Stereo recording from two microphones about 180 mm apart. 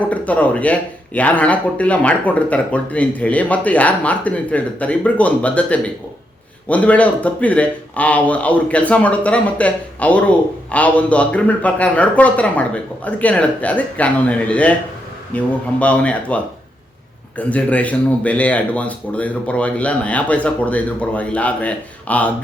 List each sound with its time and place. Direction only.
0.1 s speech: 10° left (ahead or behind)